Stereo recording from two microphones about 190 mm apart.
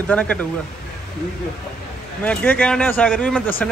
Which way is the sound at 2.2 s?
5° left (ahead or behind).